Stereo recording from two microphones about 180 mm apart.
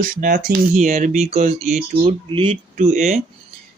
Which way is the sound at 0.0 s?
50° right (ahead or behind).